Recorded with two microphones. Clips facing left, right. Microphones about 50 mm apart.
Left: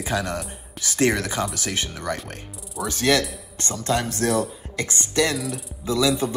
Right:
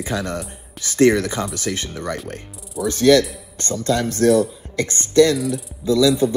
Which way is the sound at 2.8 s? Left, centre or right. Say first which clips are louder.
Right 7 dB; left.